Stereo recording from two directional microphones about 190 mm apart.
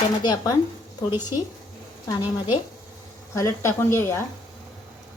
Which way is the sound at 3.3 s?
15° left (ahead or behind).